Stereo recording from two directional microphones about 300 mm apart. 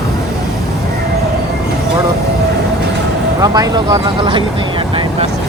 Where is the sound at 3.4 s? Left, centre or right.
Centre.